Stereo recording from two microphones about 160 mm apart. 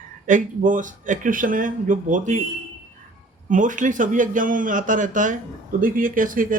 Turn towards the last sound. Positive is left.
turn(degrees=-55)  # may be behind; listen again after turning